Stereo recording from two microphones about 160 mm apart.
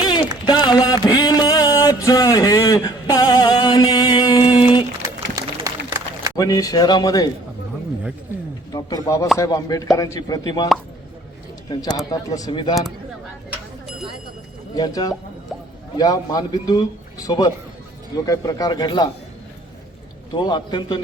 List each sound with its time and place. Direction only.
0.0 s a sound: 30° left (ahead or behind)
5.6 s run: 20° right (ahead or behind)
6.3 s a man's voice: 25° left (ahead or behind)
8.7 s a man's voice: 20° left (ahead or behind)
11.7 s a man's voice: 25° left (ahead or behind)
14.8 s a man's voice: 25° left (ahead or behind)
20.3 s a man's voice: 25° left (ahead or behind)